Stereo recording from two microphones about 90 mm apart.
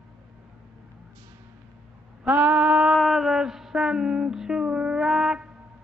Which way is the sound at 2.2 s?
20° right (ahead or behind).